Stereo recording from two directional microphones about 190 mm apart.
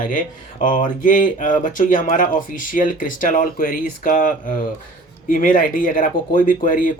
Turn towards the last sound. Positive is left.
turn(degrees=45)  # may be behind; listen again after turning